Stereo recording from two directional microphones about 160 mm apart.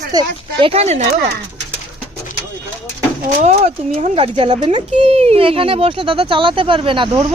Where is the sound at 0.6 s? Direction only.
40° right (ahead or behind).